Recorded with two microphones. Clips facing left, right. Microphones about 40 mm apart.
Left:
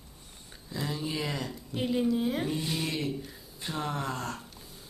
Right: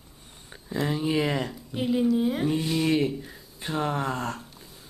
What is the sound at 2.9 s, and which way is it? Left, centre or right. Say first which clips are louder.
Speech: right 9 dB; centre.